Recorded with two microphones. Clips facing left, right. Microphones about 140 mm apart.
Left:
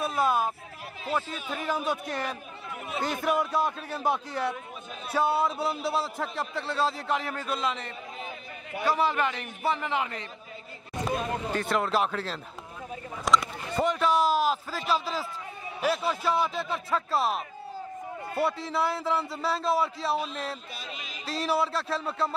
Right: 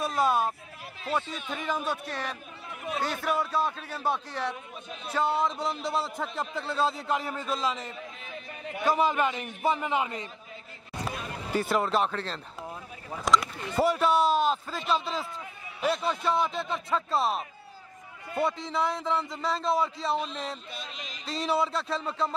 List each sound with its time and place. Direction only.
0.0 s a man's voice: centre (ahead or behind)
8.8 s a man's voice: 15° right (ahead or behind)
11.5 s a man's voice: 5° right (ahead or behind)
18.4 s a man's voice: 5° left (ahead or behind)